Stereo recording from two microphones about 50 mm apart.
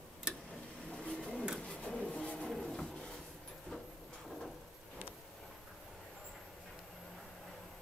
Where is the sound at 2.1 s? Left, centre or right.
Centre.